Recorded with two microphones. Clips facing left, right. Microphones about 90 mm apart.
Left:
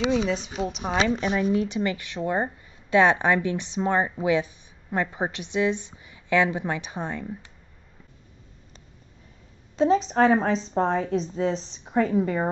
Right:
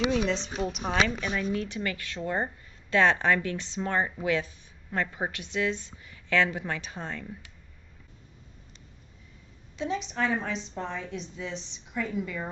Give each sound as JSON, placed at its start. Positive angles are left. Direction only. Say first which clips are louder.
{"t": 0.0, "sound": "a woman's voice", "louder": "left 3 dB", "side_deg": 20}
{"t": 0.7, "sound": "a woman's voice", "louder": "left 2 dB", "side_deg": 0}
{"t": 1.4, "sound": "a woman's voice", "louder": "left 7 dB", "side_deg": 20}
{"t": 9.8, "sound": "a woman's voice", "louder": "left 10 dB", "side_deg": 35}